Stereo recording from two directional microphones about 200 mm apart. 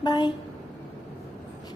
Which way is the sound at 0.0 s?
20° left (ahead or behind).